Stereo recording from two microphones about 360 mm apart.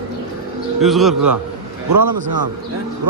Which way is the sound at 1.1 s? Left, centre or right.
Right.